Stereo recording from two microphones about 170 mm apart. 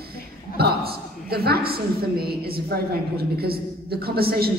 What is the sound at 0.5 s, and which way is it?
A woman's voice, 65° right (ahead or behind).